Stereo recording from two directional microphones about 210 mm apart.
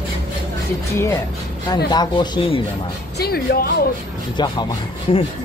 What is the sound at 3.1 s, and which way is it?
Speech, 45° left (ahead or behind).